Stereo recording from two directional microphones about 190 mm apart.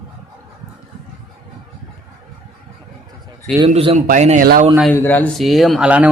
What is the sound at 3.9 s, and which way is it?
Speech, 45° right (ahead or behind).